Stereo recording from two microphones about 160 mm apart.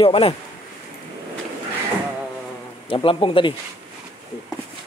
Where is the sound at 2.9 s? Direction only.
35° left (ahead or behind).